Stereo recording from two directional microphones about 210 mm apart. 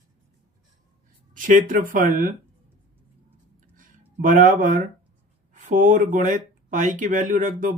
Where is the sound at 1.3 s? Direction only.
40° right (ahead or behind).